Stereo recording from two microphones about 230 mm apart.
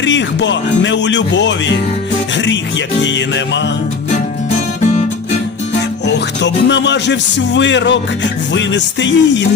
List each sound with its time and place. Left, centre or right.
0.0 s speech: left
2.3 s music: left
3.0 s speech: left
4.8 s music: left
6.1 s speech: left